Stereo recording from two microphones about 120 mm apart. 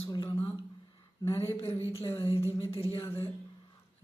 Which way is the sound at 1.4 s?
20° left (ahead or behind).